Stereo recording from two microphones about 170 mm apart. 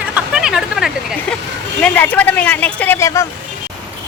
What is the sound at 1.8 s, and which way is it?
Speech, 10° left (ahead or behind).